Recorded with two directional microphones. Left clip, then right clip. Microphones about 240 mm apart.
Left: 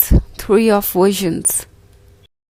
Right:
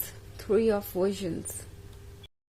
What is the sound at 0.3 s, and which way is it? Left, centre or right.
Speech, left.